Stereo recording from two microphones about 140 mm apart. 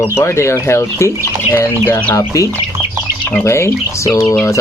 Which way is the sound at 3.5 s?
20° left (ahead or behind).